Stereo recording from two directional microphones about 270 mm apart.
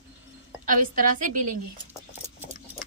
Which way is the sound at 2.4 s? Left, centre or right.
Centre.